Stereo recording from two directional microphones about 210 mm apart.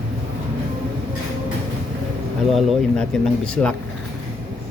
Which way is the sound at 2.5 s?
Centre (ahead or behind).